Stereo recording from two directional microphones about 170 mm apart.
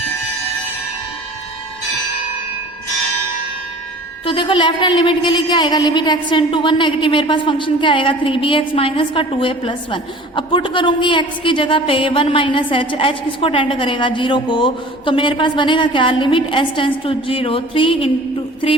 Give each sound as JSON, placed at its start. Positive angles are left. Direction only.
{"t": 4.3, "sound": "a woman's voice", "side_deg": 30}